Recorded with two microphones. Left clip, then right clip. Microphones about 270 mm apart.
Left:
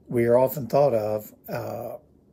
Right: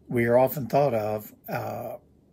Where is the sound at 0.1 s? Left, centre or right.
Centre.